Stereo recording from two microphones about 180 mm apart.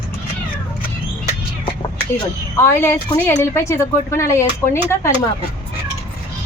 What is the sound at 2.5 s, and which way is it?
A woman's voice, 15° left (ahead or behind).